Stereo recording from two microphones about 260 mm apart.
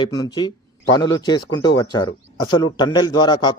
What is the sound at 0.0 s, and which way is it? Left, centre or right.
A man's voice, centre.